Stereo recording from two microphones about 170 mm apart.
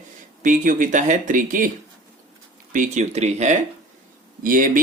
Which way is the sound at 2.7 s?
45° right (ahead or behind).